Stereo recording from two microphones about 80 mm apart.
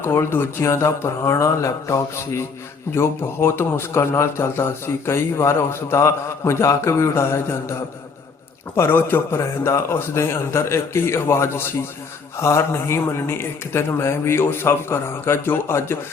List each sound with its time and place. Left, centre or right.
0.0 s a man's voice: left